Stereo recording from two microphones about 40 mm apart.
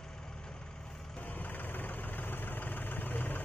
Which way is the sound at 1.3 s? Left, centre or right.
Left.